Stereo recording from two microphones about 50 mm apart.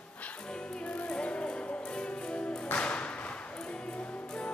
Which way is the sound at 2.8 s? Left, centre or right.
Left.